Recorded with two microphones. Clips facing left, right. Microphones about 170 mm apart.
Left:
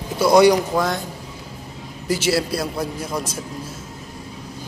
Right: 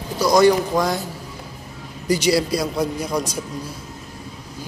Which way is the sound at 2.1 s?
5° left (ahead or behind).